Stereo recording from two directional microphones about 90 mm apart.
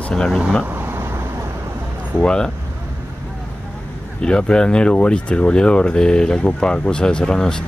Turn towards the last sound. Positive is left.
turn(degrees=10)  # may be behind; listen again after turning